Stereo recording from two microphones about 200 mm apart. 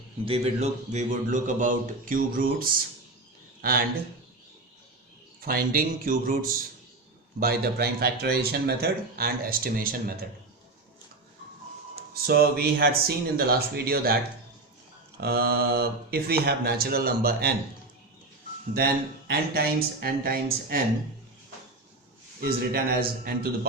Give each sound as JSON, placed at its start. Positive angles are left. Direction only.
{"t": 0.3, "sound": "a man's voice", "side_deg": -30}
{"t": 5.4, "sound": "speech", "side_deg": -45}
{"t": 12.1, "sound": "speech", "side_deg": -50}
{"t": 15.2, "sound": "speech", "side_deg": -50}
{"t": 19.3, "sound": "speech", "side_deg": -50}
{"t": 22.4, "sound": "speech", "side_deg": -50}